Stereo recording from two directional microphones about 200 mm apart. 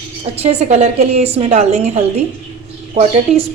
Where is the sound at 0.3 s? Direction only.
30° right (ahead or behind).